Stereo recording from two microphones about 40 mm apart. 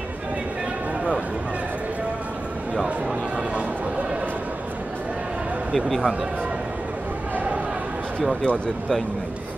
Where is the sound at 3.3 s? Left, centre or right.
Right.